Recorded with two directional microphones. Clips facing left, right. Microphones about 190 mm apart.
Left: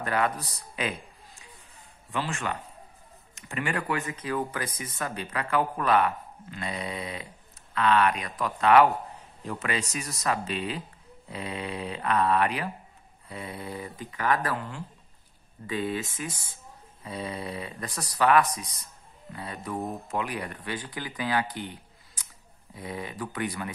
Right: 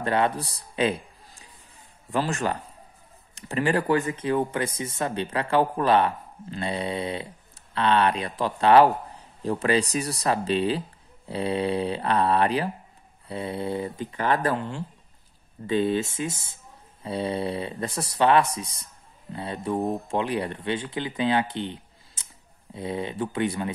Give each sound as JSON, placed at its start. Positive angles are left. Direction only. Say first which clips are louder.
{"t": 0.0, "sound": "a man's voice", "louder": "right 4 dB", "side_deg": -30}
{"t": 2.0, "sound": "speech", "louder": "right 6 dB", "side_deg": -40}